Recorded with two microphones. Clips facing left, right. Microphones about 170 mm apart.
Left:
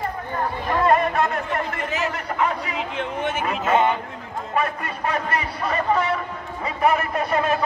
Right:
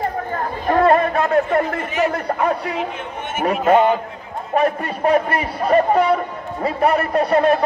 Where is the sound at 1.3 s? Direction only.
35° right (ahead or behind).